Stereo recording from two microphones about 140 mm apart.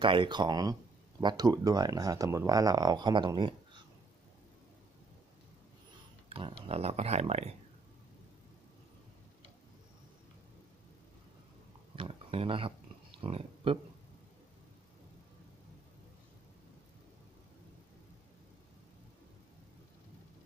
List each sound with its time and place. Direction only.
0.0 s speech: 35° right (ahead or behind)
6.2 s speech: 40° right (ahead or behind)
11.9 s speech: 40° right (ahead or behind)